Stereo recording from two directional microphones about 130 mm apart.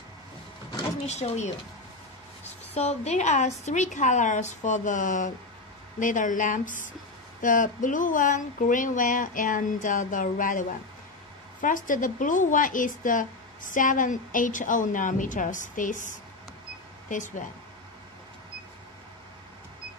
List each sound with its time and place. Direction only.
1.0 s speech: 60° left (ahead or behind)
2.7 s a woman's voice: 55° left (ahead or behind); by 17.5 s 80° left